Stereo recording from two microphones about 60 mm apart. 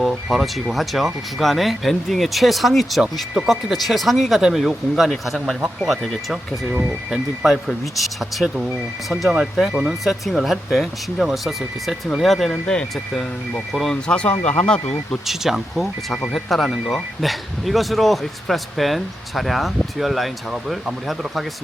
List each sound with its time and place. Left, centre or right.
0.3 s speech: centre
7.1 s speech: centre
12.6 s speech: centre
13.7 s speech: centre
14.1 s speech: centre
15.3 s speech: centre